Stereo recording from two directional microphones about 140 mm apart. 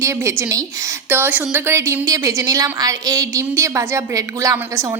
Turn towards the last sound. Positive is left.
turn(degrees=-20)  # may be behind; listen again after turning